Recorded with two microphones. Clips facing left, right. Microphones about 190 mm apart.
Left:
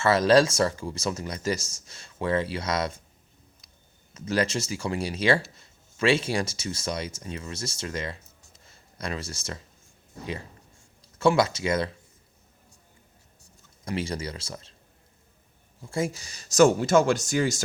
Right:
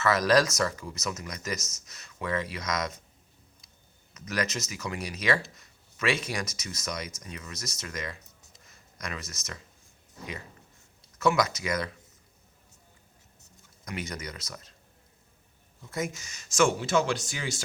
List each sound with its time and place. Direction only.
0.0 s speech: 30° left (ahead or behind)
4.1 s speech: 30° left (ahead or behind)
8.6 s a sound: 30° left (ahead or behind)
11.2 s speech: 30° left (ahead or behind)
13.8 s speech: 30° left (ahead or behind)
15.8 s speech: 30° left (ahead or behind)